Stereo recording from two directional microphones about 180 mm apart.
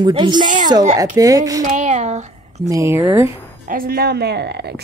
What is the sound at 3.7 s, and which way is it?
A woman's voice, 55° right (ahead or behind).